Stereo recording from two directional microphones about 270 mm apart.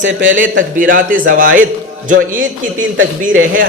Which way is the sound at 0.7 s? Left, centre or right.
Right.